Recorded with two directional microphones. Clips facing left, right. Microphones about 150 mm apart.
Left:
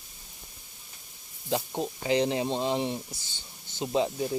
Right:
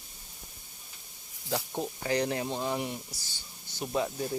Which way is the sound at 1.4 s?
20° left (ahead or behind).